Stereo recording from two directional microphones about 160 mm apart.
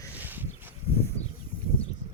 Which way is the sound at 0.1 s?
10° right (ahead or behind).